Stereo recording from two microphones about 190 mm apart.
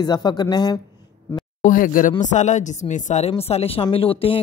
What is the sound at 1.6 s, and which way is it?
Speech, 45° left (ahead or behind).